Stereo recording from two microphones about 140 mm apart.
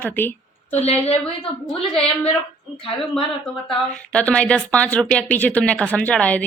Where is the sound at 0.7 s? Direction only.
50° left (ahead or behind).